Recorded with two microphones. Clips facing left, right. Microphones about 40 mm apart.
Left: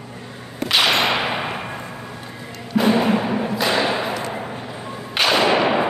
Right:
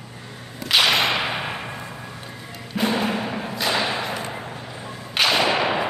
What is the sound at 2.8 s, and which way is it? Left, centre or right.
Music, centre.